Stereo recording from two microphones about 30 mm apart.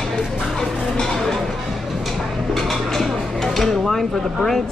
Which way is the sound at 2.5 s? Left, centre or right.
Centre.